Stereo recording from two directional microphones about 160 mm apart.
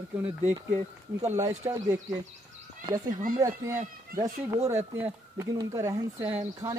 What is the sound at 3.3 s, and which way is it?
Speech, 20° right (ahead or behind).